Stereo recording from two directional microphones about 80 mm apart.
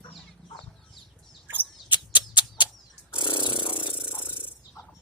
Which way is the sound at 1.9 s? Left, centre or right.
Left.